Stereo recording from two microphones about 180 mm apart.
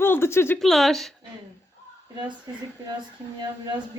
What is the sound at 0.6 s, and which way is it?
Speech, centre (ahead or behind).